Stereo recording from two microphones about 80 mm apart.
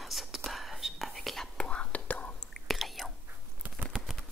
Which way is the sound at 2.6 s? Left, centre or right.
Centre.